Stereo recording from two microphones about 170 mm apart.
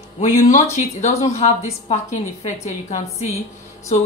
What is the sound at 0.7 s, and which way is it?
A woman's voice, 40° left (ahead or behind).